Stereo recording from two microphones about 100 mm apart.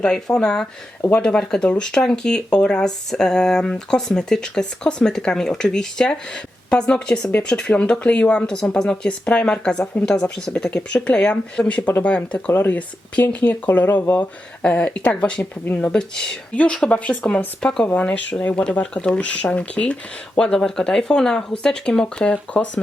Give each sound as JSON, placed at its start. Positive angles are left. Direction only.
{"t": 0.0, "sound": "speech", "side_deg": 10}